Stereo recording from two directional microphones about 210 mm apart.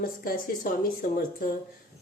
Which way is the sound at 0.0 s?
40° left (ahead or behind).